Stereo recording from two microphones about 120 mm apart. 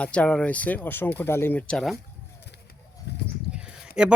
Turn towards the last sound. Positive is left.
turn(degrees=-5)  # may be behind; listen again after turning